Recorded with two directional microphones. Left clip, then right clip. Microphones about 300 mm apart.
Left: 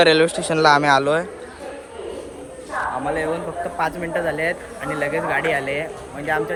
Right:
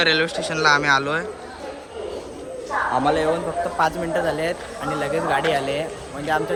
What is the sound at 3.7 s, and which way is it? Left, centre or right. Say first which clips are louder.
Speech: right 1 dB; centre.